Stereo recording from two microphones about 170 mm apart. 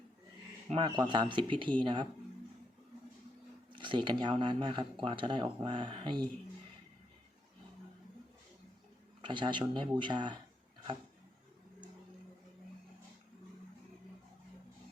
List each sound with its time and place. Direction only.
0.7 s speech: 30° right (ahead or behind)
3.7 s speech: 30° right (ahead or behind)
9.2 s speech: 30° right (ahead or behind)